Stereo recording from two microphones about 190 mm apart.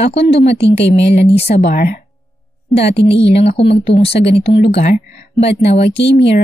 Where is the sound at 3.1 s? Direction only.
30° left (ahead or behind).